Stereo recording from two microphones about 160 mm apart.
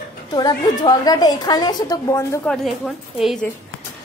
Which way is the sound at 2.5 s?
Centre (ahead or behind).